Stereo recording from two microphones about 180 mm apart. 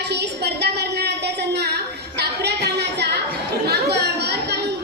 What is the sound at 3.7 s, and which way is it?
Chatter, 65° right (ahead or behind).